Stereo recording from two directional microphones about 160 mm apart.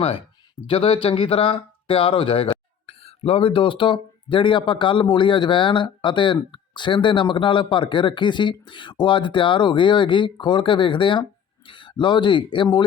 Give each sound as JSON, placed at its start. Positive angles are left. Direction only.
{"t": 0.0, "sound": "speech", "side_deg": 35}